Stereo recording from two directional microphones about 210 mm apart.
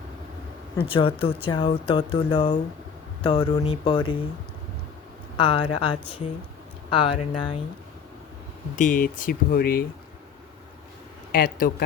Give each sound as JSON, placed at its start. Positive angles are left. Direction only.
{"t": 0.9, "sound": "speech", "side_deg": 25}
{"t": 5.4, "sound": "speech", "side_deg": 25}
{"t": 6.9, "sound": "speech", "side_deg": 25}
{"t": 8.7, "sound": "speech", "side_deg": 40}
{"t": 11.3, "sound": "speech", "side_deg": 45}